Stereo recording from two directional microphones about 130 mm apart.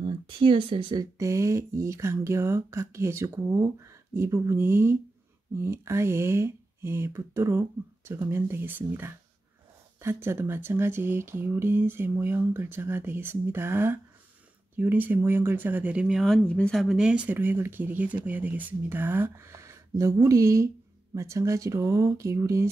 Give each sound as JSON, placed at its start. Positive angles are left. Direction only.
{"t": 0.0, "sound": "speech", "side_deg": -40}
{"t": 1.1, "sound": "speech", "side_deg": -25}